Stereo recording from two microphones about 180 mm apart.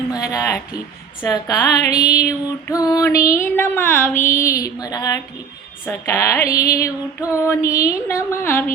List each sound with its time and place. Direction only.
0.2 s speech: 20° left (ahead or behind)
2.6 s female singing: 20° left (ahead or behind)
4.4 s speech: 15° left (ahead or behind)
5.8 s female singing: 15° left (ahead or behind)